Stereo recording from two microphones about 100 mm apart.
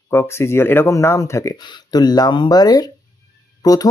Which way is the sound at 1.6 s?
45° left (ahead or behind).